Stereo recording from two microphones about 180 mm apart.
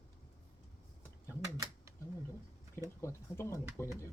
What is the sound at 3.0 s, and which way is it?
Speech, 15° left (ahead or behind).